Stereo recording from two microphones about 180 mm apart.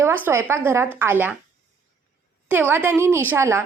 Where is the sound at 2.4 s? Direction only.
10° right (ahead or behind).